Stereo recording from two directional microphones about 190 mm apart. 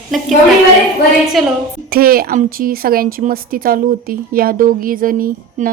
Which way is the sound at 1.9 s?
50° right (ahead or behind).